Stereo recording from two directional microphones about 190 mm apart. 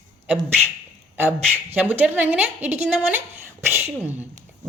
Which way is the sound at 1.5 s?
10° right (ahead or behind).